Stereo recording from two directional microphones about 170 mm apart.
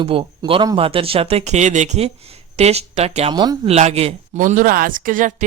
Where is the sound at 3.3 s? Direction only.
25° right (ahead or behind).